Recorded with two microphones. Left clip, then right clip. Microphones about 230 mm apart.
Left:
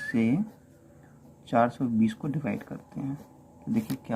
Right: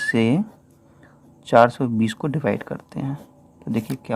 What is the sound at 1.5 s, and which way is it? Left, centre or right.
Speech, right.